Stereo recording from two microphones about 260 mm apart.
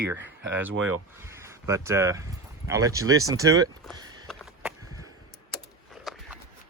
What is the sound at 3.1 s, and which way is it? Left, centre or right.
Speech, right.